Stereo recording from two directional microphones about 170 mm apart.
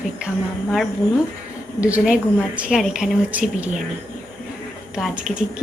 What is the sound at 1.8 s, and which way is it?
A woman's voice, 5° right (ahead or behind).